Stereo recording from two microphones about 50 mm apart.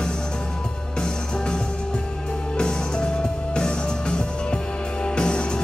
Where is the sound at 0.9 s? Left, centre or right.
Centre.